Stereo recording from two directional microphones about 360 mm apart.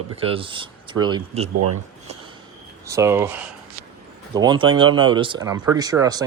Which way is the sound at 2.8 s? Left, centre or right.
Centre.